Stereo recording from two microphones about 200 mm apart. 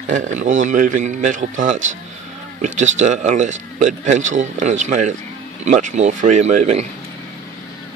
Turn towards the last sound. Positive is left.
turn(degrees=-35)  # may be behind; listen again after turning